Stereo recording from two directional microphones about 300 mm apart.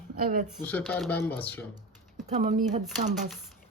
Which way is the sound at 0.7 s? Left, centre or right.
Centre.